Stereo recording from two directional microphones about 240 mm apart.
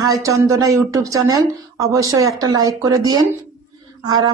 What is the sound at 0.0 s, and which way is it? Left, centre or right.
Speech, centre.